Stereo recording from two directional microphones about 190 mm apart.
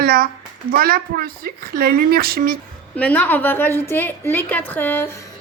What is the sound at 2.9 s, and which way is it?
A woman's voice, 5° left (ahead or behind).